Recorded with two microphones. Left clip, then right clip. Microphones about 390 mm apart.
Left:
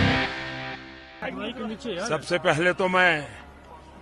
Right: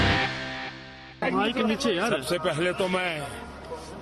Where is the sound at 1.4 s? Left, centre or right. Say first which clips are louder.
Right 8 dB; right.